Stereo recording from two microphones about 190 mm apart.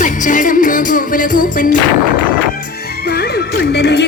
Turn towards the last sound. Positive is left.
turn(degrees=60)  # may be behind; listen again after turning